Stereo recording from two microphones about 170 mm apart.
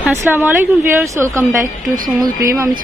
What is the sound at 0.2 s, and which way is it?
A woman's voice, 10° right (ahead or behind).